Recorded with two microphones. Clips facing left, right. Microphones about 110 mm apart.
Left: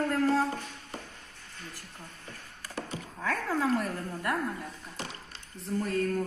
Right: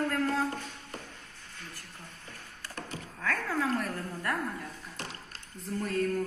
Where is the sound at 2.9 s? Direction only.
25° left (ahead or behind).